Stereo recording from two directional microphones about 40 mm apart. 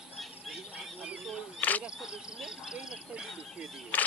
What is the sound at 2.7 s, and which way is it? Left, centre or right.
Bird, centre.